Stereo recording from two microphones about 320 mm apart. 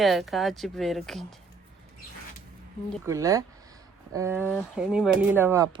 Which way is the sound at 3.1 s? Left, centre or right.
Centre.